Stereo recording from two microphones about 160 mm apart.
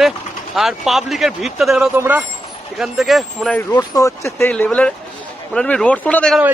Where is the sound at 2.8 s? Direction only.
Centre (ahead or behind).